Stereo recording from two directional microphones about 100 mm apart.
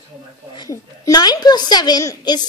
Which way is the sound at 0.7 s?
35° left (ahead or behind).